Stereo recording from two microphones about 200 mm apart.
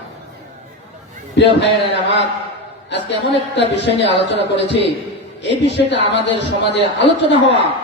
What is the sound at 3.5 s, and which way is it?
Speech, 60° left (ahead or behind).